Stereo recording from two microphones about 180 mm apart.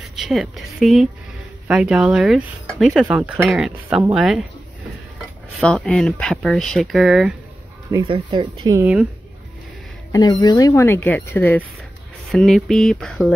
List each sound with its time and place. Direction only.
0.1 s a woman's voice: centre (ahead or behind)
5.6 s speech: 5° left (ahead or behind)
7.9 s speech: 25° right (ahead or behind)
10.4 s speech: 20° left (ahead or behind)
12.3 s speech: centre (ahead or behind)